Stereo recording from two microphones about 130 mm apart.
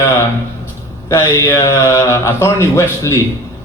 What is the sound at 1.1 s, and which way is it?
A man's voice, 20° left (ahead or behind).